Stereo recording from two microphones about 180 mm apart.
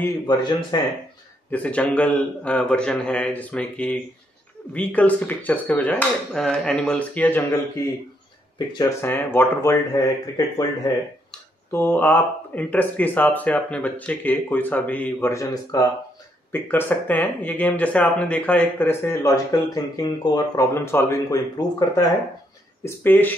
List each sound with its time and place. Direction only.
0.3 s speech: 25° left (ahead or behind)
1.5 s speech: 10° left (ahead or behind)
8.5 s speech: 20° left (ahead or behind)
11.7 s speech: 10° left (ahead or behind)